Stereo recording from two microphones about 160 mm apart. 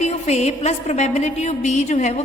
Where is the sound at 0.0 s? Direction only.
45° left (ahead or behind).